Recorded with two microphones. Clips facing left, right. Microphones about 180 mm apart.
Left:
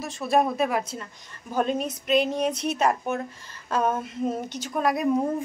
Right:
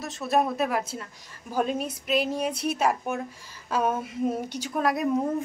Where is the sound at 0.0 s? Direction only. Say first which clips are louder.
Left 2 dB; centre (ahead or behind).